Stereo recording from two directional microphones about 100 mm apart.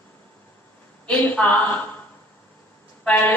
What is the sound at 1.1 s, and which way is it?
Speech, 15° left (ahead or behind).